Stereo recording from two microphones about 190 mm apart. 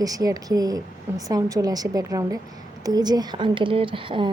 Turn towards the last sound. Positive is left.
turn(degrees=-25)  # may be behind; listen again after turning